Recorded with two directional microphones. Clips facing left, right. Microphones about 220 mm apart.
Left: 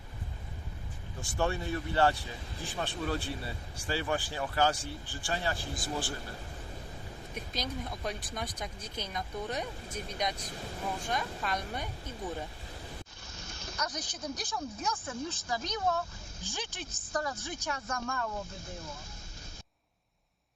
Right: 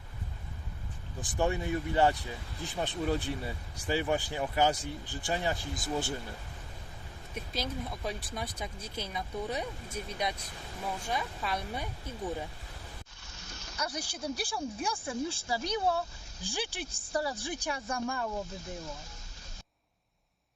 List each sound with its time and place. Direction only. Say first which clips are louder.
1.2 s speech: right 2 dB; 15° right (ahead or behind)
7.5 s speech: right 2 dB; 5° right (ahead or behind)
13.7 s speech: right 2 dB; 10° right (ahead or behind)